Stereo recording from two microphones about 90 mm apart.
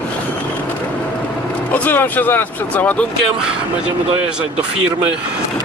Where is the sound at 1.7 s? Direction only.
20° left (ahead or behind).